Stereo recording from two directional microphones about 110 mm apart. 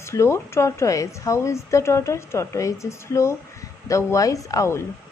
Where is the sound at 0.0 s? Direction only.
25° left (ahead or behind).